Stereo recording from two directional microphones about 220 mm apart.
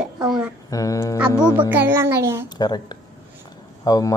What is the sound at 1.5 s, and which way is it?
Speech, 10° right (ahead or behind).